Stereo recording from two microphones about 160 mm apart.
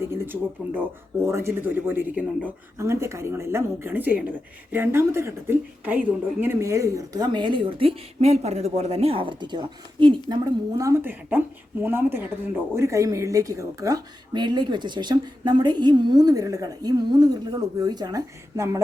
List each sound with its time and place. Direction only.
0.1 s speech: 15° right (ahead or behind)